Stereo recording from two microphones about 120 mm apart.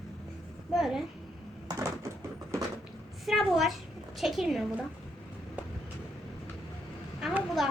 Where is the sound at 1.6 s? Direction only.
25° right (ahead or behind).